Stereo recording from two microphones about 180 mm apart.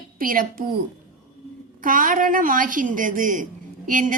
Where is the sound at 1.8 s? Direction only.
50° right (ahead or behind).